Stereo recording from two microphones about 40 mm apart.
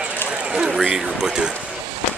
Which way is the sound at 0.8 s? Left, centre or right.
Centre.